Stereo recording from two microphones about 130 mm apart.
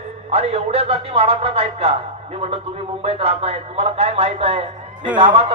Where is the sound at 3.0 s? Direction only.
50° right (ahead or behind).